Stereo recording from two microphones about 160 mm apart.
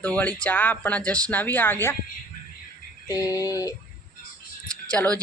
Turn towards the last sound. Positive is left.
turn(degrees=10)  # may be behind; listen again after turning